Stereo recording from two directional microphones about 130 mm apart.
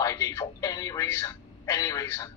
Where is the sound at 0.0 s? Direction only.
25° left (ahead or behind).